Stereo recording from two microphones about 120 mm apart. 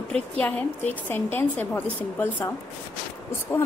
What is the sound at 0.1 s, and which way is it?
A woman's voice, 10° left (ahead or behind).